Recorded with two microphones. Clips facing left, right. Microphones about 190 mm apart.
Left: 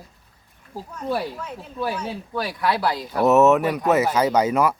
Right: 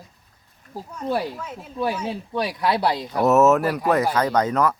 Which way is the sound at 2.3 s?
20° right (ahead or behind).